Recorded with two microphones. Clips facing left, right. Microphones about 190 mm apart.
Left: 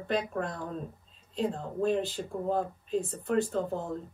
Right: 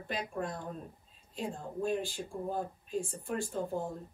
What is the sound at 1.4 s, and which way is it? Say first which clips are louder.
Speech: left 6 dB; 70° left (ahead or behind).